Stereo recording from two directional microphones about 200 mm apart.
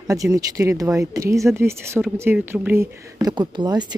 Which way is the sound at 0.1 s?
15° right (ahead or behind).